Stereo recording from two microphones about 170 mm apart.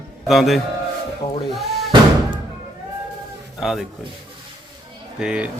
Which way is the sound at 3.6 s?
Centre (ahead or behind).